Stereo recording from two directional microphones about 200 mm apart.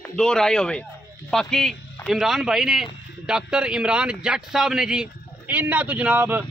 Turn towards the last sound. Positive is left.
turn(degrees=-10)  # may be behind; listen again after turning